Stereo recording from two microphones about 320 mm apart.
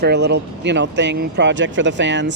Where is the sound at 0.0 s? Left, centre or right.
Right.